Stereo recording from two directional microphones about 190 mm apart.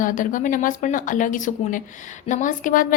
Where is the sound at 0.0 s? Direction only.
45° left (ahead or behind).